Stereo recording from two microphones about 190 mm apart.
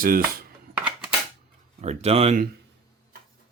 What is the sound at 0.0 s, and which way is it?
Dishes, 50° right (ahead or behind).